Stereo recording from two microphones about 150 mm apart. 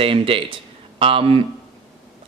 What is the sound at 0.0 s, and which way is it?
A man's voice, 40° right (ahead or behind).